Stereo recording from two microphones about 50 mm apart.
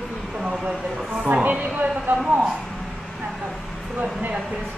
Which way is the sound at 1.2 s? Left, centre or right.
Right.